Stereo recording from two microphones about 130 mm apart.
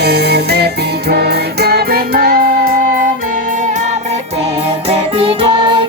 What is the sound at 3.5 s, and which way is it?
Music, 75° right (ahead or behind).